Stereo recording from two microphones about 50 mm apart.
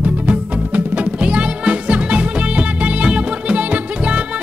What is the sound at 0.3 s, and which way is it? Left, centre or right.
Music, right.